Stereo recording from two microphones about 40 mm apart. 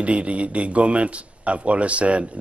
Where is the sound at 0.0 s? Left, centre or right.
Right.